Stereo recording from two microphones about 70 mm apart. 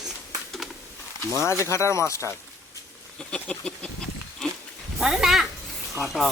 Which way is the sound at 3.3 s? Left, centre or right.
Centre.